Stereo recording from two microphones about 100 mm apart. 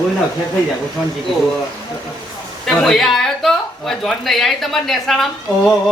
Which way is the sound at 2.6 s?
5° left (ahead or behind).